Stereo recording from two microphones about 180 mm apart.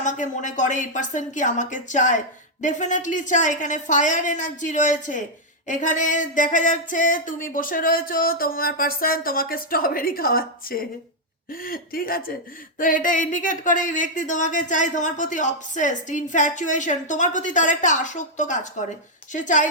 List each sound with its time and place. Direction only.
0.0 s speech: 45° left (ahead or behind)